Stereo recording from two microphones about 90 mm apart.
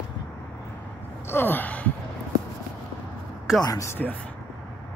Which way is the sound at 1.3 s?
20° left (ahead or behind).